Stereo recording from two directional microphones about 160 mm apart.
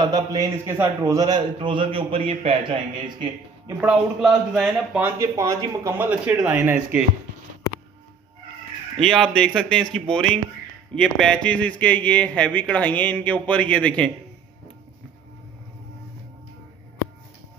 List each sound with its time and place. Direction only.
0.0 s a man's voice: 25° right (ahead or behind)
3.6 s a man's voice: 5° right (ahead or behind)
5.2 s speech: 20° right (ahead or behind)
5.9 s a man's voice: 10° right (ahead or behind)
9.0 s speech: 5° left (ahead or behind)